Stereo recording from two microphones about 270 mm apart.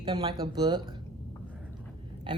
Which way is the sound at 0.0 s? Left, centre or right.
Centre.